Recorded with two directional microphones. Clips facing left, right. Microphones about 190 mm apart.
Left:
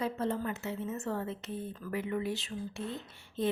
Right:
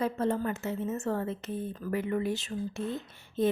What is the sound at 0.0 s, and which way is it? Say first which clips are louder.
A woman's voice: right 4 dB; 50° right (ahead or behind).